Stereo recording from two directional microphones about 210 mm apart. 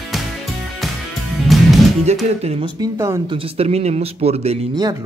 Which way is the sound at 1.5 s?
Centre (ahead or behind).